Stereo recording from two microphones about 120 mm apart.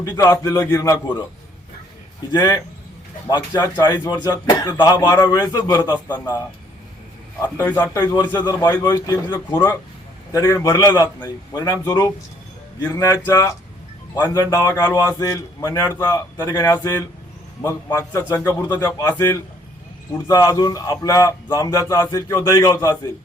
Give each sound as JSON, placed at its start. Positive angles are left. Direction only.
{"t": 0.0, "sound": "a man's voice", "side_deg": 30}
{"t": 2.3, "sound": "speech", "side_deg": 30}
{"t": 7.5, "sound": "a man's voice", "side_deg": 25}
{"t": 18.8, "sound": "speech", "side_deg": 30}
{"t": 20.2, "sound": "a man's voice", "side_deg": 30}